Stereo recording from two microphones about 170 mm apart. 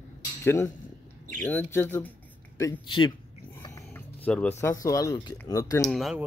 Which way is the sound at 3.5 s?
15° left (ahead or behind).